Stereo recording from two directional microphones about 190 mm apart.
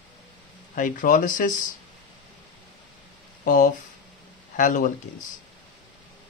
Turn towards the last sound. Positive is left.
turn(degrees=45)  # may be behind; listen again after turning